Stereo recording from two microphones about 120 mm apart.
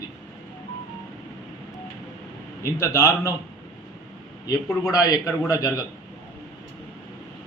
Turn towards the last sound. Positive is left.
turn(degrees=25)  # may be behind; listen again after turning